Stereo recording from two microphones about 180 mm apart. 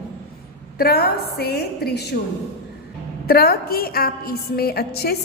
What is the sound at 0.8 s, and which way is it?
A woman's voice, 60° left (ahead or behind).